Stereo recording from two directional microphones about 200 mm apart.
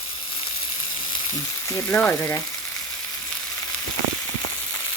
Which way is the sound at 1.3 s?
15° left (ahead or behind).